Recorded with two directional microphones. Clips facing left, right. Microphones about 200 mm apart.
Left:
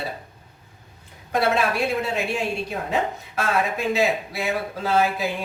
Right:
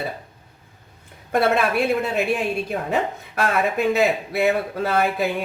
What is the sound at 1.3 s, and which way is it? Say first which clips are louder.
A man's voice: right 2 dB; 55° right (ahead or behind).